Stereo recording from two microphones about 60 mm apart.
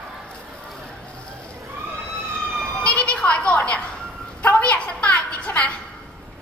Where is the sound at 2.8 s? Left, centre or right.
Centre.